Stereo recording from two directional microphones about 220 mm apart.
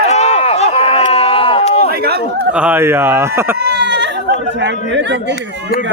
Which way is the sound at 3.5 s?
45° right (ahead or behind).